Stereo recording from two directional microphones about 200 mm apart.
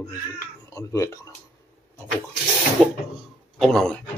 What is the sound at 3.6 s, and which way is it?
Speech, centre (ahead or behind).